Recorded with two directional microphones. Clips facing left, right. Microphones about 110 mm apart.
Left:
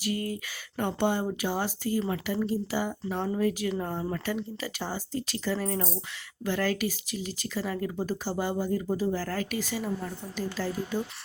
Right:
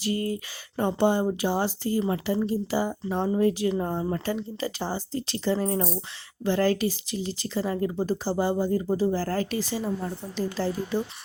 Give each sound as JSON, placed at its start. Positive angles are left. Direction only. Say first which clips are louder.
{"t": 0.0, "sound": "speech", "louder": "right 3 dB", "side_deg": -30}